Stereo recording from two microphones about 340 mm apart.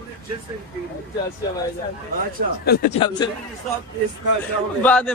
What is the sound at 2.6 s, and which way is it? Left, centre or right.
Speech, left.